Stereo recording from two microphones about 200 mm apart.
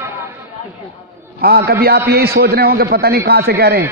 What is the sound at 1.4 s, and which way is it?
A man's voice, 50° right (ahead or behind).